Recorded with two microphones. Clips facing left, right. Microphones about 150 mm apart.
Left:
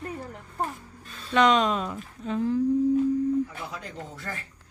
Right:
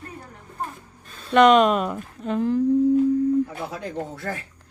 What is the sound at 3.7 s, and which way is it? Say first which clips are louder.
Speech: right 8 dB; 60° right (ahead or behind).